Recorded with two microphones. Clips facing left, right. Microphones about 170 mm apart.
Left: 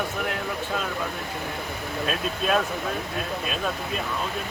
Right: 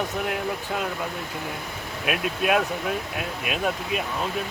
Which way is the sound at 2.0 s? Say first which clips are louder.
Right 2 dB; 10° right (ahead or behind).